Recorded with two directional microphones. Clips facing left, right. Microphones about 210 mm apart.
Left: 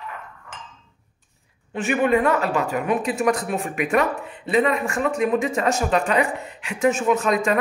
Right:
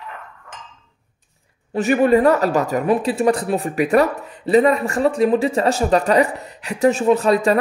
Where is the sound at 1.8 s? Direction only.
40° right (ahead or behind).